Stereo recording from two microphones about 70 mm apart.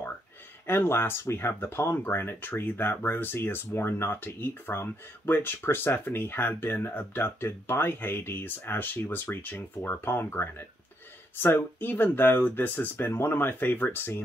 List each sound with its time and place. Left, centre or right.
0.7 s speech: left